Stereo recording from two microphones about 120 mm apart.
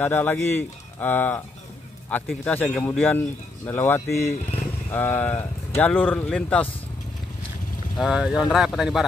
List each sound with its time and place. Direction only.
0.0 s speech: 15° left (ahead or behind)
8.0 s speech: 5° right (ahead or behind)